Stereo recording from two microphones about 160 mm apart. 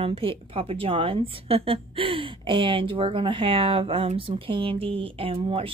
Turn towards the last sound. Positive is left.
turn(degrees=-35)  # may be behind; listen again after turning